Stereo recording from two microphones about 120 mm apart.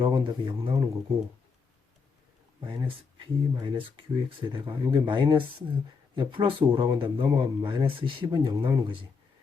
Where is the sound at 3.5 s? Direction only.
40° right (ahead or behind).